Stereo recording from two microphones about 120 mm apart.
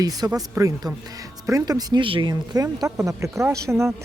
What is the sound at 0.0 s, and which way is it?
Speech, 30° right (ahead or behind).